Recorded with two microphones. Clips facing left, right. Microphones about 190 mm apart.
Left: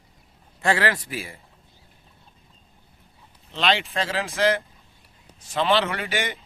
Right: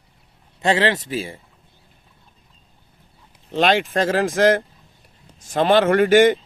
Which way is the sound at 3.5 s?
45° right (ahead or behind).